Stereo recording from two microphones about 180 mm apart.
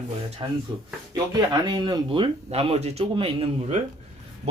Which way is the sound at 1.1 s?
25° right (ahead or behind).